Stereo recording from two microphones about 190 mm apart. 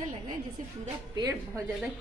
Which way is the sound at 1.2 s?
20° right (ahead or behind).